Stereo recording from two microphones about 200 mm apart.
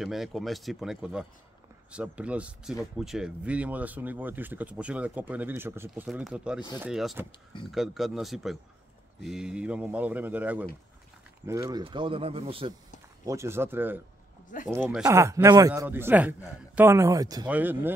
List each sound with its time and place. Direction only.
0.0 s speech: centre (ahead or behind); by 12.7 s 30° right (ahead or behind)
13.2 s speech: 15° right (ahead or behind)